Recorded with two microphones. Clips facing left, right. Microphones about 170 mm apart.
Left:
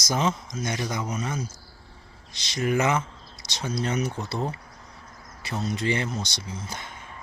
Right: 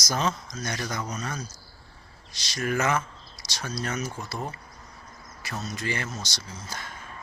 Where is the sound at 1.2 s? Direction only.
20° left (ahead or behind).